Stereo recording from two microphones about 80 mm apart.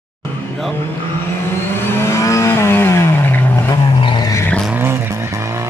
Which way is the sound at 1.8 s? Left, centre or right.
Left.